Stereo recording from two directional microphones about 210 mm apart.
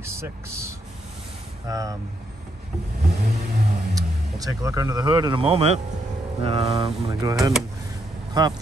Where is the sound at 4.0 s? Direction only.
15° right (ahead or behind).